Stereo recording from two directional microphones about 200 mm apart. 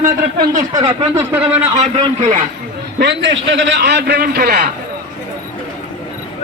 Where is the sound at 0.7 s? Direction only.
20° right (ahead or behind).